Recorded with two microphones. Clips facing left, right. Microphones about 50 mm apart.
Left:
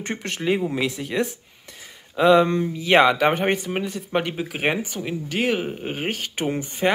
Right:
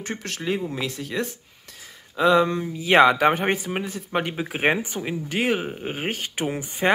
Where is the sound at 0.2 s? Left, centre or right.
Centre.